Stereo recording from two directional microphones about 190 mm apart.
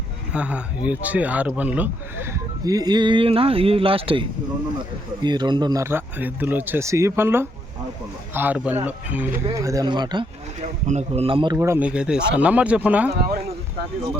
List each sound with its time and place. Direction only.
0.3 s speech: 5° right (ahead or behind)
2.6 s speech: 20° right (ahead or behind)
10.8 s a man's voice: 35° right (ahead or behind)
11.5 s speech: 10° right (ahead or behind)
13.1 s speech: 50° right (ahead or behind)